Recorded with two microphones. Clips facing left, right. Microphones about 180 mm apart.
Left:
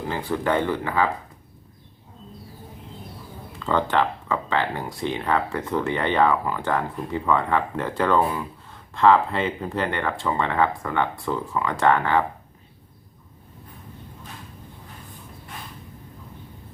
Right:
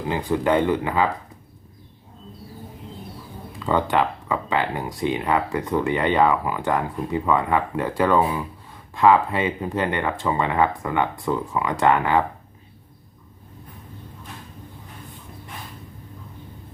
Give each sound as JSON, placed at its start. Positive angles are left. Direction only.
{"t": 0.1, "sound": "speech", "side_deg": -15}
{"t": 3.7, "sound": "speech", "side_deg": -15}